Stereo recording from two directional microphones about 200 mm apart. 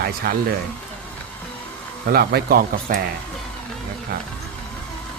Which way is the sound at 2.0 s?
50° right (ahead or behind).